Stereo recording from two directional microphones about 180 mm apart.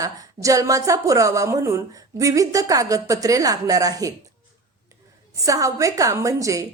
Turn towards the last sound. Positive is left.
turn(degrees=-20)  # may be behind; listen again after turning